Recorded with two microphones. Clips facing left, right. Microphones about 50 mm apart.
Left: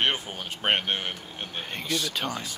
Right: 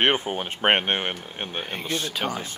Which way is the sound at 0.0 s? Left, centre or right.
Right.